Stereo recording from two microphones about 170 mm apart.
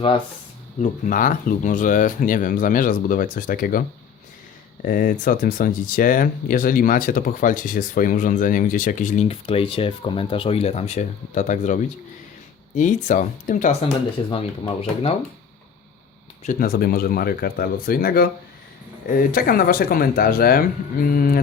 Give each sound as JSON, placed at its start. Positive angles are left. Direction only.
{"t": 0.8, "sound": "speech", "side_deg": 50}
{"t": 4.9, "sound": "speech", "side_deg": 55}
{"t": 14.7, "sound": "speech", "side_deg": 35}
{"t": 16.4, "sound": "speech", "side_deg": 55}